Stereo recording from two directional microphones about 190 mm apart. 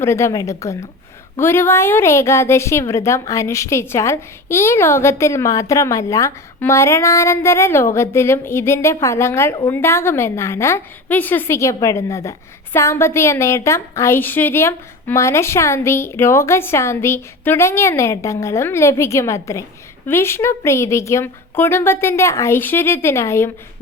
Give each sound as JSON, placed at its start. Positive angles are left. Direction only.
{"t": 0.0, "sound": "a woman's voice", "side_deg": 15}